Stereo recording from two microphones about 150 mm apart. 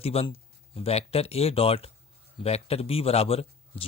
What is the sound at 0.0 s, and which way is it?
A man's voice, 40° left (ahead or behind).